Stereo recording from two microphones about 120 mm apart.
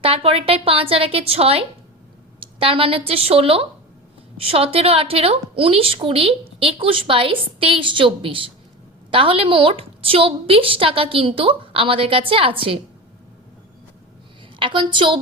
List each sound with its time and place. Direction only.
0.0 s a woman's voice: 50° right (ahead or behind)
14.6 s a woman's voice: 45° right (ahead or behind)